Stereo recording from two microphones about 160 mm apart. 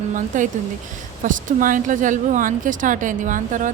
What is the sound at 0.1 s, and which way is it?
A woman's voice, 50° right (ahead or behind).